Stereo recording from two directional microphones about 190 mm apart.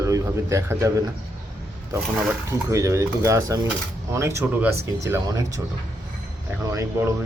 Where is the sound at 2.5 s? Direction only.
15° right (ahead or behind).